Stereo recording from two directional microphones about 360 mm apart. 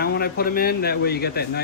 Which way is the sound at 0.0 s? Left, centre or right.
Left.